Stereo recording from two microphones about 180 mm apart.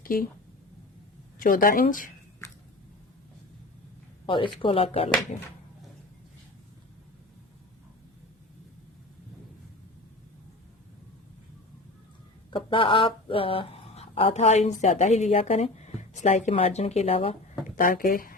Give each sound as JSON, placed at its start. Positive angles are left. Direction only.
{"t": 0.0, "sound": "speech", "side_deg": 55}
{"t": 1.4, "sound": "speech", "side_deg": 50}
{"t": 4.6, "sound": "speech", "side_deg": 30}
{"t": 12.5, "sound": "speech", "side_deg": 30}
{"t": 17.7, "sound": "speech", "side_deg": 50}